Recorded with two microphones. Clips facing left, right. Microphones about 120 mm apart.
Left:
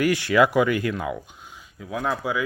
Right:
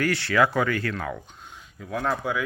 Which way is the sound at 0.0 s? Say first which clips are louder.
Left 3 dB; 15° left (ahead or behind).